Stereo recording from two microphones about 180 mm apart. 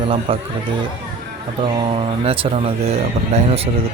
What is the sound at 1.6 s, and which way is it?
Speech, 30° right (ahead or behind).